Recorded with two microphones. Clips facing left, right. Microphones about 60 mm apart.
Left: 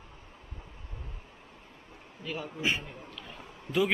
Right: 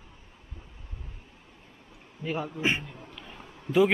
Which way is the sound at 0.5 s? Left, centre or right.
Centre.